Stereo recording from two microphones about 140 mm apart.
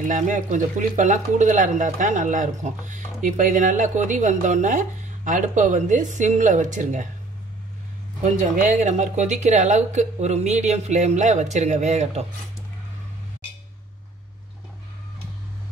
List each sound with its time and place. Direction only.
0.0 s speech: 60° right (ahead or behind)
8.2 s speech: 60° right (ahead or behind)